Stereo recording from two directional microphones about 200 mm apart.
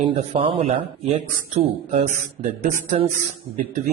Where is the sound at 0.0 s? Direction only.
25° right (ahead or behind).